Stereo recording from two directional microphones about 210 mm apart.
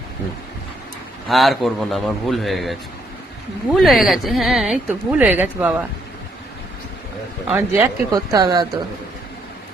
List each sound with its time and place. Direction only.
1.3 s speech: centre (ahead or behind)
7.4 s speech: 10° right (ahead or behind)